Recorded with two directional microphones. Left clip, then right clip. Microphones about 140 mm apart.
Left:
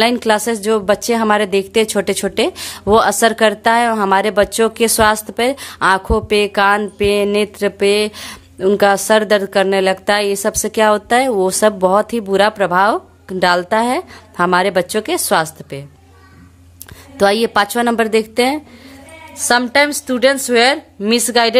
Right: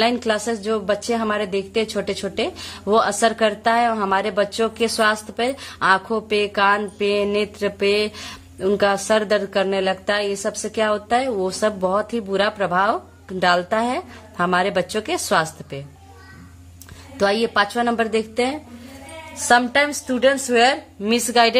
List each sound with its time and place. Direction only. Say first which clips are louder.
0.0 s a woman's voice: left 6 dB; 40° left (ahead or behind)
17.2 s a woman's voice: left 5 dB; 40° left (ahead or behind)
19.4 s a woman's voice: left 3 dB; 30° left (ahead or behind)